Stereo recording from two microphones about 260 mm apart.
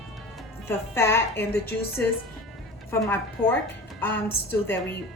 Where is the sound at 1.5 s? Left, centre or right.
Left.